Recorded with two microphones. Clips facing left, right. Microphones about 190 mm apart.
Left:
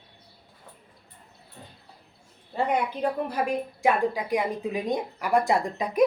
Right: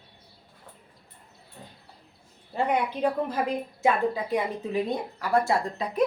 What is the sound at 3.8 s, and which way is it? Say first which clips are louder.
Speech: even; 15° left (ahead or behind).